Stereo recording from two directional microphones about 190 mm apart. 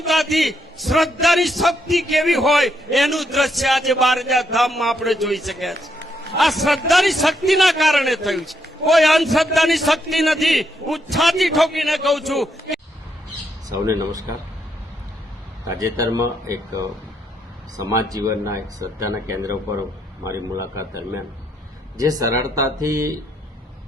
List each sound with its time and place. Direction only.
0.0 s a man's voice: centre (ahead or behind)
13.7 s speech: 15° right (ahead or behind)
15.6 s speech: 15° right (ahead or behind)
17.7 s speech: 20° right (ahead or behind)